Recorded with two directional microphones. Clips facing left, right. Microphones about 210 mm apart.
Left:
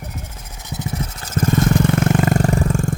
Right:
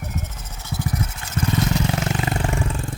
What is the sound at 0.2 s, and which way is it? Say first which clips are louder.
Vehicle: right 1 dB; 10° left (ahead or behind).